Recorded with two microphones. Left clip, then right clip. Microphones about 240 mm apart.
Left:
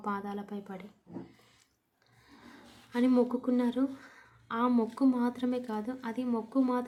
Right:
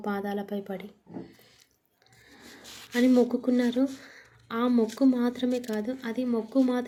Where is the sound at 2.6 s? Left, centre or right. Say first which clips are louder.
Right 10 dB; right.